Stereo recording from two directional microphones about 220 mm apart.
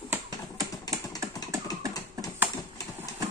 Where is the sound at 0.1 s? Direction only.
15° right (ahead or behind).